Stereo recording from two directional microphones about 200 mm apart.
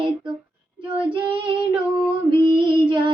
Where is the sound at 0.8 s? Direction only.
25° right (ahead or behind).